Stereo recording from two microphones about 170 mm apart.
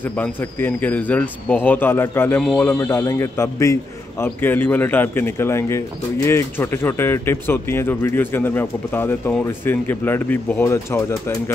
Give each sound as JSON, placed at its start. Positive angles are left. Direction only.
{"t": 0.2, "sound": "a man's voice", "side_deg": 10}